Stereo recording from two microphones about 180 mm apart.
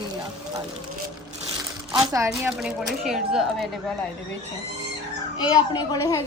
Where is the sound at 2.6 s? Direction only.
Centre (ahead or behind).